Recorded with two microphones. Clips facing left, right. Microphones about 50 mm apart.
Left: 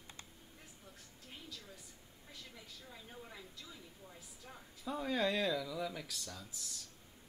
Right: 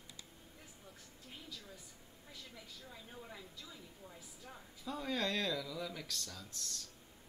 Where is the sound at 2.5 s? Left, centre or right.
Centre.